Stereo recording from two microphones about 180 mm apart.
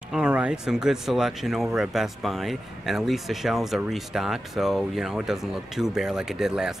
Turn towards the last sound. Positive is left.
turn(degrees=-5)  # may be behind; listen again after turning